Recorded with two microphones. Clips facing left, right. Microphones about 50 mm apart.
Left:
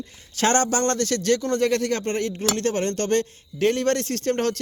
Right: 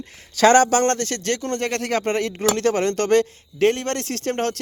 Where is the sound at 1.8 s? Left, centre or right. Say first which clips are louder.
Right 3 dB; right.